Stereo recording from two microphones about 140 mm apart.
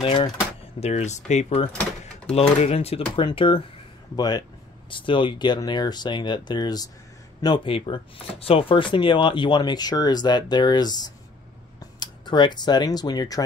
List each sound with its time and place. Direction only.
0.0 s speech: 35° left (ahead or behind)
0.7 s speech: 50° left (ahead or behind)
3.3 s speech: 35° left (ahead or behind)